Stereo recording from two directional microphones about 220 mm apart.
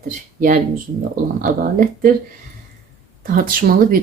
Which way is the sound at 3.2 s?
40° right (ahead or behind).